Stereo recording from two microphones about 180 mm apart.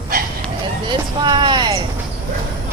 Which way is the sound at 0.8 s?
25° right (ahead or behind).